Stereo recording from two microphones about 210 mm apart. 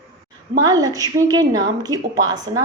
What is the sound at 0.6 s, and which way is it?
A woman's voice, 15° right (ahead or behind).